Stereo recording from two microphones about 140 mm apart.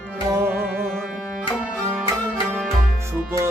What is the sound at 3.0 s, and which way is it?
Music, 20° right (ahead or behind).